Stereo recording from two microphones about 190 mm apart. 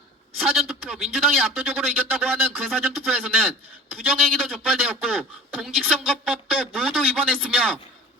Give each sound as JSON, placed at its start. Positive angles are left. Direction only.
{"t": 0.3, "sound": "a man's voice", "side_deg": 0}